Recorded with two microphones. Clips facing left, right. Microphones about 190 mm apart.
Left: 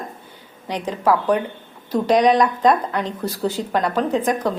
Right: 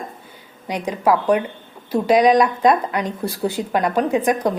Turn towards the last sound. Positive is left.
turn(degrees=-15)  # may be behind; listen again after turning